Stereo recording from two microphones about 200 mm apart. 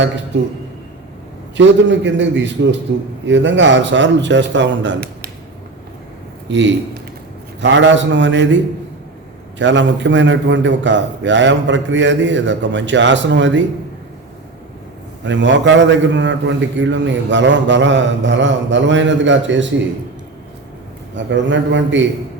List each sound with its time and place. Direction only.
0.3 s a man's voice: 60° right (ahead or behind)
1.5 s a man's voice: 65° right (ahead or behind)
6.5 s a man's voice: 65° right (ahead or behind)
15.2 s a man's voice: 65° right (ahead or behind)
21.2 s a man's voice: 65° right (ahead or behind)